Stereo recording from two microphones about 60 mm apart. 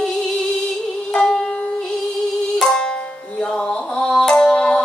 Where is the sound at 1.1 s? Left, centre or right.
Centre.